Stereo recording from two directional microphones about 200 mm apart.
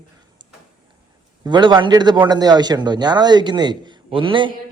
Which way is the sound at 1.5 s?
25° right (ahead or behind).